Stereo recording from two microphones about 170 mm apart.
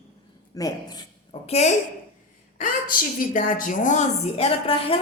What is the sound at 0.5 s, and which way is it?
Speech, 20° left (ahead or behind).